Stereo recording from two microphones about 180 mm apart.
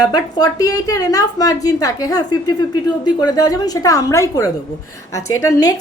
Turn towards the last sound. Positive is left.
turn(degrees=20)  # may be behind; listen again after turning